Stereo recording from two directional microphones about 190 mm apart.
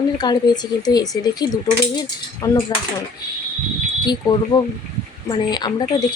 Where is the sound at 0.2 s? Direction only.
20° left (ahead or behind).